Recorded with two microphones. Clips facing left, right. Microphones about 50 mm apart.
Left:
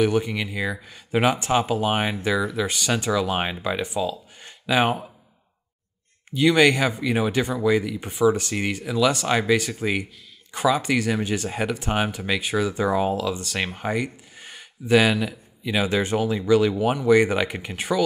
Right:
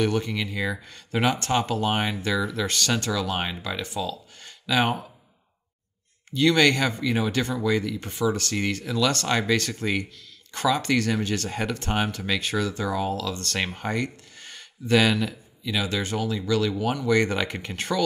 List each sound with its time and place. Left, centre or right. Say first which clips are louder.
0.0 s speech: left 3 dB; centre
6.3 s speech: left 2 dB; centre
12.8 s speech: left 5 dB; left; by 15.3 s centre
15.6 s speech: left 4 dB; left